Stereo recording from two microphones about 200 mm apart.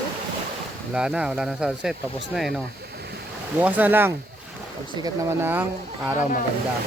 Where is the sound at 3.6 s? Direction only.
10° right (ahead or behind).